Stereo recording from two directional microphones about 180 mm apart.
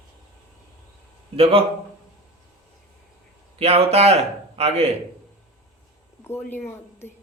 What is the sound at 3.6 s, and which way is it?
Speech, 35° right (ahead or behind).